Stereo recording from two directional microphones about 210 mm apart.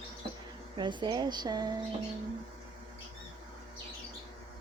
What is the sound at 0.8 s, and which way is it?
Speech, 20° right (ahead or behind).